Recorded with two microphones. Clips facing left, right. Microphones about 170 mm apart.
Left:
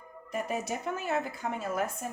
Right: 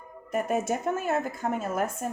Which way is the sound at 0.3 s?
50° right (ahead or behind).